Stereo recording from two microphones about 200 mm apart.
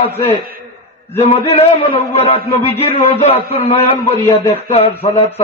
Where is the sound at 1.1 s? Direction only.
30° left (ahead or behind).